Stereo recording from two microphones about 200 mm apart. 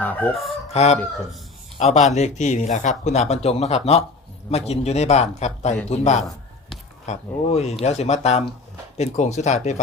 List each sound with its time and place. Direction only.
0.0 s speech: 10° left (ahead or behind)
0.7 s speech: 30° left (ahead or behind)